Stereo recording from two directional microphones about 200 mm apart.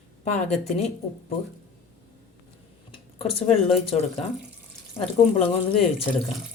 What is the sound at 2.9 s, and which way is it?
Speech, 30° left (ahead or behind).